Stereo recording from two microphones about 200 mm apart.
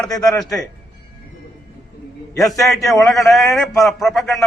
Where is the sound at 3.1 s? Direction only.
Centre (ahead or behind).